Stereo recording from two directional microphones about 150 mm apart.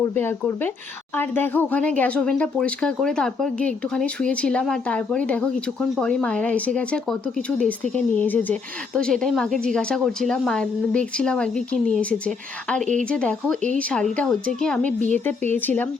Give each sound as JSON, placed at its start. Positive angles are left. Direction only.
{"t": 0.0, "sound": "a woman's voice", "side_deg": 15}
{"t": 12.8, "sound": "speech", "side_deg": -55}
{"t": 13.1, "sound": "a woman's voice", "side_deg": 5}